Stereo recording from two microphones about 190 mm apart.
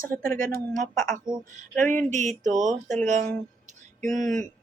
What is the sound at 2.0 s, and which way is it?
Speech, 40° right (ahead or behind).